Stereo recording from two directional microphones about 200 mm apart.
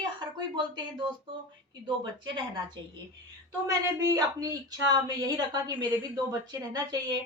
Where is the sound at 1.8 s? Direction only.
25° right (ahead or behind).